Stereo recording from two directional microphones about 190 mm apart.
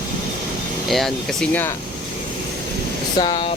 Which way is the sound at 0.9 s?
Centre (ahead or behind).